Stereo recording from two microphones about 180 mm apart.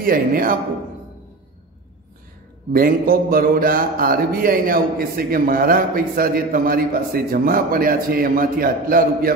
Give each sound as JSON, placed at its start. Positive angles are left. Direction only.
{"t": 0.0, "sound": "speech", "side_deg": -55}
{"t": 2.7, "sound": "speech", "side_deg": -55}